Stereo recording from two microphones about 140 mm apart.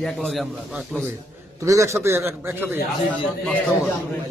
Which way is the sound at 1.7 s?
20° right (ahead or behind).